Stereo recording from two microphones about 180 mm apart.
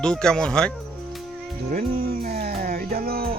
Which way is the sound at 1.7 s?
55° right (ahead or behind).